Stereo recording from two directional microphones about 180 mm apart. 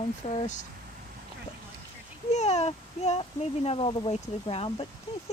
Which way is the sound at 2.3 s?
40° left (ahead or behind).